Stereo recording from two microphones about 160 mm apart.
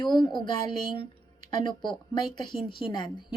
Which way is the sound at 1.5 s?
30° left (ahead or behind).